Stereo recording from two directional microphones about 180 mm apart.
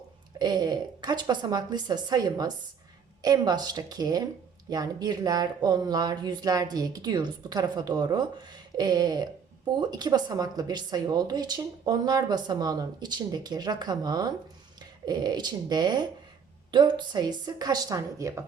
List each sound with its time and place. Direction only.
0.3 s speech: 25° right (ahead or behind)